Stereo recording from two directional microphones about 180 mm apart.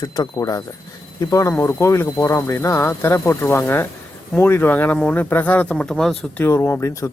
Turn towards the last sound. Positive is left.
turn(degrees=15)  # may be behind; listen again after turning